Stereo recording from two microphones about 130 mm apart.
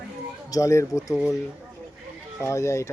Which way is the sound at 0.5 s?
25° left (ahead or behind).